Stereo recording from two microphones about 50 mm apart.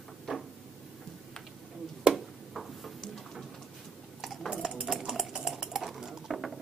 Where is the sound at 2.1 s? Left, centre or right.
Centre.